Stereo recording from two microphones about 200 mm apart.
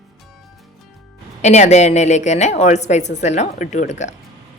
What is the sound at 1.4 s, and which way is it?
Speech, 35° left (ahead or behind).